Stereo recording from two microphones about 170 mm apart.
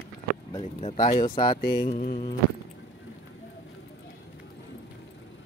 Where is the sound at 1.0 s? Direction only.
55° left (ahead or behind).